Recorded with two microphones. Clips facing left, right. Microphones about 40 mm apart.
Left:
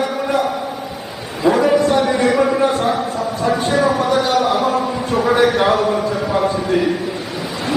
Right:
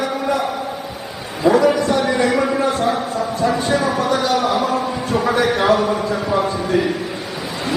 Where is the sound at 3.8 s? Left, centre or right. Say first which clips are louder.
Left 2 dB; centre.